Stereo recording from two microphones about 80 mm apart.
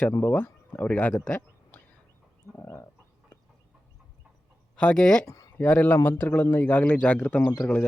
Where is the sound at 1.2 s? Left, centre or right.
Centre.